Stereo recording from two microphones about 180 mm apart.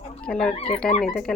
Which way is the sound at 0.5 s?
35° left (ahead or behind).